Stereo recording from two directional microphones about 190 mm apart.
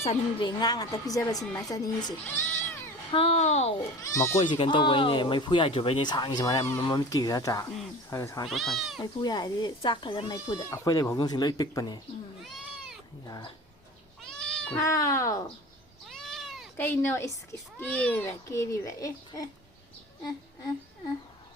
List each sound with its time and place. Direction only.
0.0 s speech: 30° left (ahead or behind)
3.1 s a child's voice: 30° left (ahead or behind)
4.0 s a child's voice: 15° left (ahead or behind)
4.4 s a child's voice: 25° left (ahead or behind)
8.4 s speech: centre (ahead or behind)
9.0 s speech: 20° left (ahead or behind)
12.4 s cat: centre (ahead or behind)
13.2 s speech: 20° left (ahead or behind)
14.2 s cat: 5° left (ahead or behind)
14.8 s a child's voice: 15° left (ahead or behind)
16.0 s cat: centre (ahead or behind)
16.7 s a child's voice: 10° left (ahead or behind)